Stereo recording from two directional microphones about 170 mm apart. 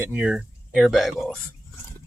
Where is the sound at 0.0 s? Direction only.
10° right (ahead or behind).